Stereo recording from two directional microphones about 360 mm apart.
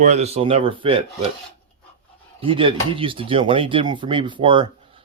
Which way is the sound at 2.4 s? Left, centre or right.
Centre.